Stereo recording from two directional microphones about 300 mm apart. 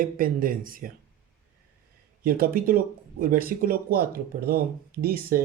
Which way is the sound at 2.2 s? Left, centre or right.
Right.